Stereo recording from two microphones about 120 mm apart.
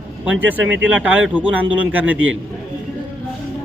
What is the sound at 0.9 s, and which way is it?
Speech, 10° right (ahead or behind).